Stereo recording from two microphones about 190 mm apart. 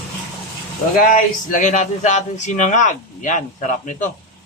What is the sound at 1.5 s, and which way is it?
Speech, 40° left (ahead or behind).